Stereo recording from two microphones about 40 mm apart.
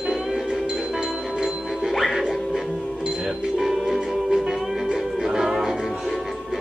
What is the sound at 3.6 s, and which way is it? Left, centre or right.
Music, centre.